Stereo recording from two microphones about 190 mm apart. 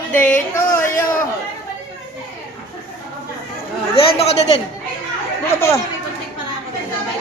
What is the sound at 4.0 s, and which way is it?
Speech, 30° left (ahead or behind).